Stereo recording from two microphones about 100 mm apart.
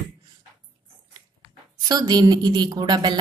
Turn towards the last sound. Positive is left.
turn(degrees=-45)  # may be behind; listen again after turning